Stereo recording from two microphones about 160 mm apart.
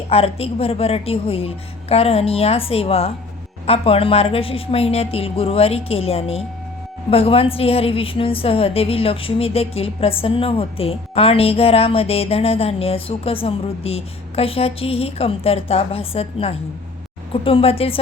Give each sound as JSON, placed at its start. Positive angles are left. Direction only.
{"t": 0.1, "sound": "a woman's voice", "side_deg": 40}